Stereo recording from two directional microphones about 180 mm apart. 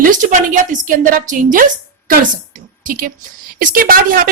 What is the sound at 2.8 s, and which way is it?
A woman's voice, 50° right (ahead or behind).